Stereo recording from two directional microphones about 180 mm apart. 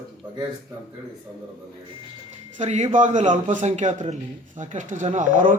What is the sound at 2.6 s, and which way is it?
A man's voice, 40° right (ahead or behind).